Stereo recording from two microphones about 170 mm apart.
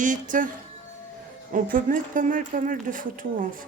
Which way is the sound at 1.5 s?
50° right (ahead or behind).